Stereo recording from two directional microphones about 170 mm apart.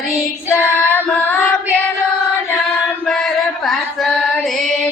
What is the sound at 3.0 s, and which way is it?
Female singing, 5° left (ahead or behind).